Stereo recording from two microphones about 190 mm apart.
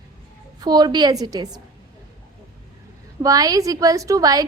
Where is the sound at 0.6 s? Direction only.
20° right (ahead or behind).